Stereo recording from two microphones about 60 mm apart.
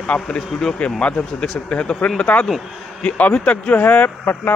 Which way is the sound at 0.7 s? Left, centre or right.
Centre.